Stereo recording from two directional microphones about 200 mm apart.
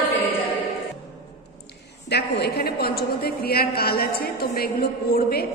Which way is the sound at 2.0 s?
55° left (ahead or behind).